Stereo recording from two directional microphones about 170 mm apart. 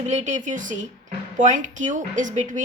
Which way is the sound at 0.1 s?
45° right (ahead or behind).